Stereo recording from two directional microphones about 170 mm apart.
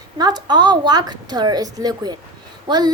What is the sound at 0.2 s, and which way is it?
A woman's voice, 25° right (ahead or behind).